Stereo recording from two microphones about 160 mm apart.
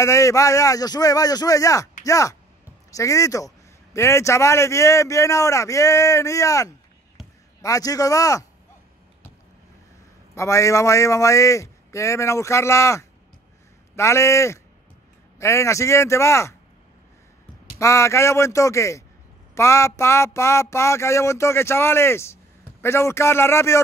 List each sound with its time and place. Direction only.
0.0 s a man's voice: 20° left (ahead or behind)
10.3 s a man's voice: 20° left (ahead or behind)
17.7 s a man's voice: 20° left (ahead or behind)